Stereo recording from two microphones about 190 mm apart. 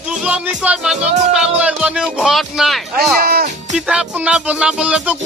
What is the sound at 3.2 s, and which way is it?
Music, 50° right (ahead or behind).